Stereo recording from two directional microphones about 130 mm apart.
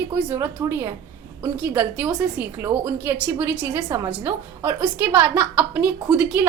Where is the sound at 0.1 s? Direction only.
10° right (ahead or behind).